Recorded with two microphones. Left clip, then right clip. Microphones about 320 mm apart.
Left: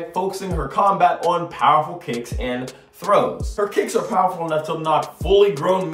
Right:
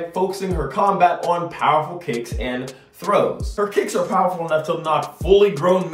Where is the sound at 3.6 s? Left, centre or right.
Centre.